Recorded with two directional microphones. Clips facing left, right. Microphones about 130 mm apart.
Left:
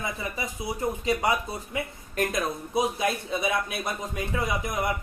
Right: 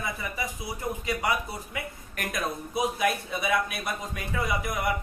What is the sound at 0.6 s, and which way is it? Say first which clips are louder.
Speech: left 7 dB; 25° left (ahead or behind).